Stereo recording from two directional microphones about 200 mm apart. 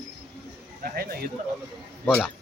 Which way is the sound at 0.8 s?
50° right (ahead or behind).